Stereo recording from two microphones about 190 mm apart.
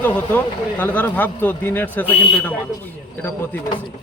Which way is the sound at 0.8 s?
10° left (ahead or behind).